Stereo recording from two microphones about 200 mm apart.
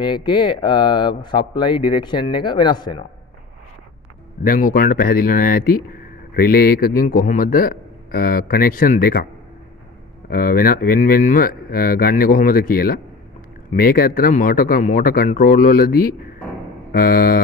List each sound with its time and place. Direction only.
0.0 s speech: 25° left (ahead or behind)
4.4 s a man's voice: 45° left (ahead or behind)
10.3 s a man's voice: 45° left (ahead or behind)